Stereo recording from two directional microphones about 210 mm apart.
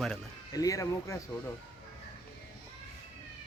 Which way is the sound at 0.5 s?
15° left (ahead or behind).